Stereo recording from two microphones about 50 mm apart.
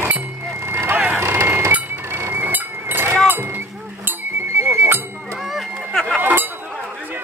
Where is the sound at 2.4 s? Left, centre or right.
Right.